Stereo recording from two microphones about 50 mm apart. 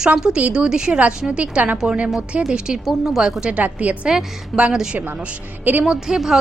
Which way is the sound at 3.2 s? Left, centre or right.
Centre.